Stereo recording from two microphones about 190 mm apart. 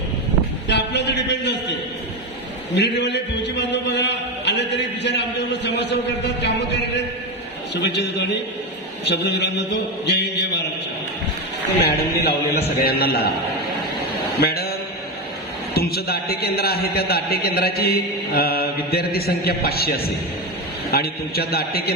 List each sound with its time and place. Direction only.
0.7 s a sound: 65° left (ahead or behind)
2.7 s a sound: 65° left (ahead or behind)
5.6 s a man's voice: 65° left (ahead or behind)
11.8 s a man's voice: 55° left (ahead or behind)
14.4 s mantra: 55° left (ahead or behind)
15.7 s a man's voice: 55° left (ahead or behind)